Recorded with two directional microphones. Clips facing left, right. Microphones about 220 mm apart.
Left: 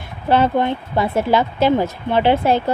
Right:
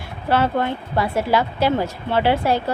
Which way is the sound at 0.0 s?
20° left (ahead or behind).